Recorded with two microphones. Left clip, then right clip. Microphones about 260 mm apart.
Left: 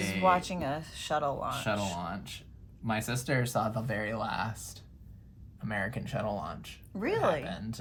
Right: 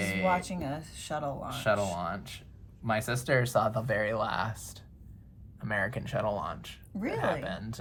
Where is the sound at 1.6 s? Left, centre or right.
Centre.